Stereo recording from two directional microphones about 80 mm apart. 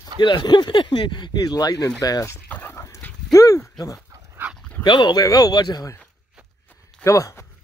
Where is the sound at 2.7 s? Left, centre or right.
Left.